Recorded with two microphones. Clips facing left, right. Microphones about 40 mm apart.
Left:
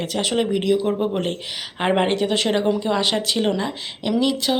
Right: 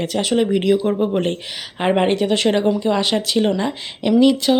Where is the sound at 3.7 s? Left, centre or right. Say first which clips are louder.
Right 5 dB; centre.